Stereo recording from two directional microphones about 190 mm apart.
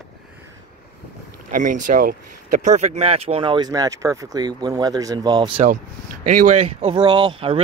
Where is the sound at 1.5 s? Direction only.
45° right (ahead or behind); by 5.6 s 20° right (ahead or behind).